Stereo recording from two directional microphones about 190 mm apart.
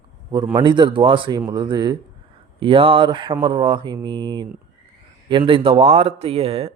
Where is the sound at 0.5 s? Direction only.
25° right (ahead or behind).